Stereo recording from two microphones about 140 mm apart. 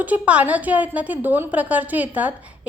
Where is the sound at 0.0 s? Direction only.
10° right (ahead or behind).